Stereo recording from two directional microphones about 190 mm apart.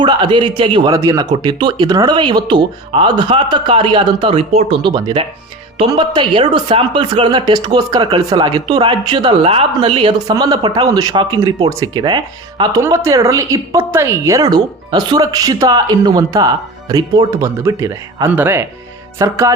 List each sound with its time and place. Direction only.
0.0 s speech: 25° right (ahead or behind)